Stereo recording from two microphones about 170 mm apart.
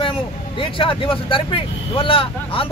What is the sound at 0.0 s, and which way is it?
Speech, 30° left (ahead or behind).